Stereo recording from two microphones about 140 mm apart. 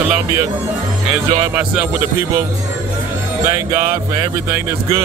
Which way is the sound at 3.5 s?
20° right (ahead or behind).